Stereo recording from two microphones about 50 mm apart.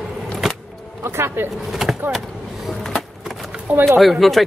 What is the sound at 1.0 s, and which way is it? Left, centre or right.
Speech, right.